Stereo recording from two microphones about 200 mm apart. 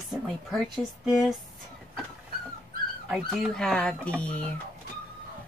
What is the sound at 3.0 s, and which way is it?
Speech, centre (ahead or behind).